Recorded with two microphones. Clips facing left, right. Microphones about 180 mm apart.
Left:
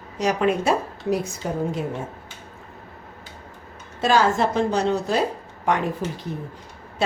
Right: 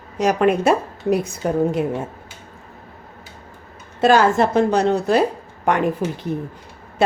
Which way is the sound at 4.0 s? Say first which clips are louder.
Right 5 dB; 55° right (ahead or behind).